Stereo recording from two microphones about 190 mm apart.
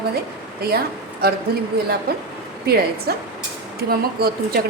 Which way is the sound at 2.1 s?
55° right (ahead or behind).